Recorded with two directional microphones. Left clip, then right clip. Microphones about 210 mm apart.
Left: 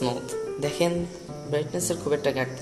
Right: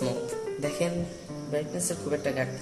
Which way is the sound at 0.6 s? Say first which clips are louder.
Left 5 dB; 40° left (ahead or behind).